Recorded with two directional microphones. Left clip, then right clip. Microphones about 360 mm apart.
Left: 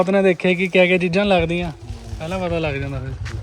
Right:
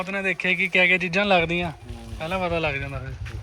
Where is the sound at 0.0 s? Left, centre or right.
Centre.